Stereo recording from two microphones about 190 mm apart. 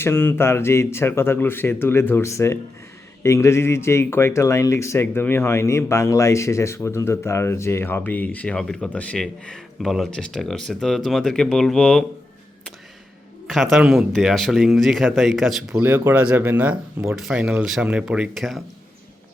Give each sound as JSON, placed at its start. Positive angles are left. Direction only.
{"t": 0.0, "sound": "speech", "side_deg": 10}
{"t": 13.5, "sound": "speech", "side_deg": 0}